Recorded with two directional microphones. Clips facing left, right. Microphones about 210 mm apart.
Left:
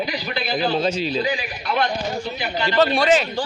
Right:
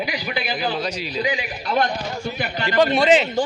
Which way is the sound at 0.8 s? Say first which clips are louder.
Left 5 dB; 25° left (ahead or behind).